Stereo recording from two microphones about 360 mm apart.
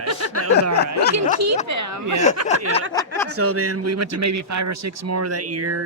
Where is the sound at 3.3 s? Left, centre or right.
Right.